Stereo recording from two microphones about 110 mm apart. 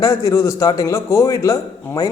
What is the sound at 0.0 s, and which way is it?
A man's voice, 30° left (ahead or behind).